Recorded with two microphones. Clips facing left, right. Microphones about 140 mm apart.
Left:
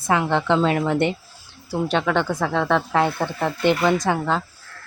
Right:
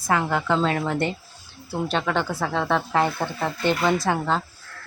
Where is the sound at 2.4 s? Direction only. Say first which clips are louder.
Left 3 dB; 10° right (ahead or behind).